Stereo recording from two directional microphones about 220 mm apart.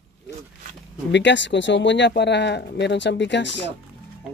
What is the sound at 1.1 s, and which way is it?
Speech, 55° left (ahead or behind).